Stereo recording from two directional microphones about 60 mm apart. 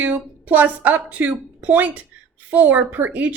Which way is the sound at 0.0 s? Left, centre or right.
Right.